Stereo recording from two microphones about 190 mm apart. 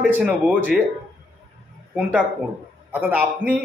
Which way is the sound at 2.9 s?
10° right (ahead or behind).